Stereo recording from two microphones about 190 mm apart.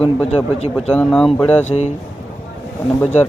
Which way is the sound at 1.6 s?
35° left (ahead or behind).